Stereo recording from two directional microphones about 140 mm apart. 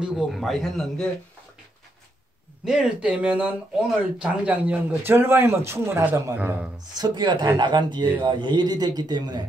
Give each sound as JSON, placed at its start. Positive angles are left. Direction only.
{"t": 0.0, "sound": "a man's voice", "side_deg": -5}
{"t": 2.6, "sound": "speech", "side_deg": -5}
{"t": 7.0, "sound": "a man's voice", "side_deg": -30}